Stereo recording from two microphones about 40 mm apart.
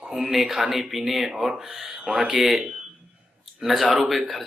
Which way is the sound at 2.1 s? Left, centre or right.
Right.